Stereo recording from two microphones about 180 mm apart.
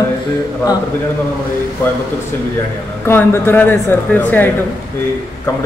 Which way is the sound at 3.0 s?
15° left (ahead or behind).